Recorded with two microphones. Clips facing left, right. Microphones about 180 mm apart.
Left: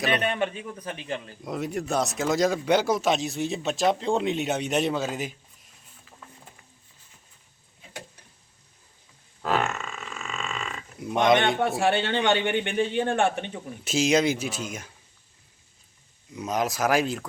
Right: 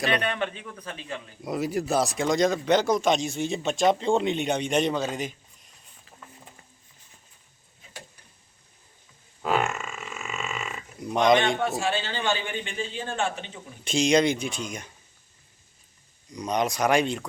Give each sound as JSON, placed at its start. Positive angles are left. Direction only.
{"t": 0.0, "sound": "a man's voice", "side_deg": 5}
{"t": 1.5, "sound": "speech", "side_deg": 0}
{"t": 9.4, "sound": "burping", "side_deg": 0}
{"t": 11.8, "sound": "a man's voice", "side_deg": 60}
{"t": 13.8, "sound": "speech", "side_deg": 5}
{"t": 16.3, "sound": "speech", "side_deg": 5}